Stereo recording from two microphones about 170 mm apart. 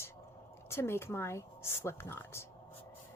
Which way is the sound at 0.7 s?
15° left (ahead or behind).